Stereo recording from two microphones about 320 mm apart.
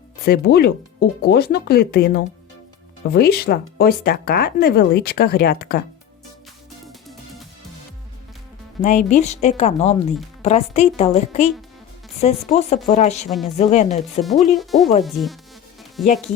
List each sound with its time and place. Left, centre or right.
0.3 s speech: left
8.8 s speech: left
14.5 s speech: centre